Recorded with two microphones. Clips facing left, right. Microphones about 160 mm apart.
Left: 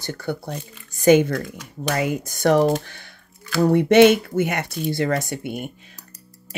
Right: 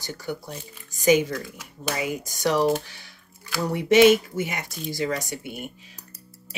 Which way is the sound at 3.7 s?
60° left (ahead or behind).